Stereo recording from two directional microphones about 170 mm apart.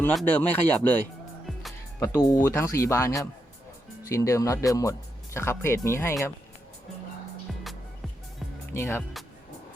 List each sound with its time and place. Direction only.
0.0 s speech: 5° left (ahead or behind)
2.0 s speech: 15° left (ahead or behind)
8.7 s speech: 15° left (ahead or behind)